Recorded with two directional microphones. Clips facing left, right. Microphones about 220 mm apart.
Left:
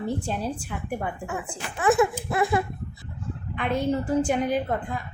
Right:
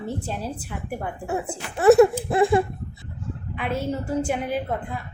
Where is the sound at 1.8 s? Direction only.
40° right (ahead or behind).